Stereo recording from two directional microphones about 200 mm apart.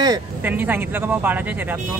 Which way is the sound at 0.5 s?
10° right (ahead or behind).